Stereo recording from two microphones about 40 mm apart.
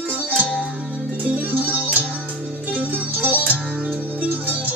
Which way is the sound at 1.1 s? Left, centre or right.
Right.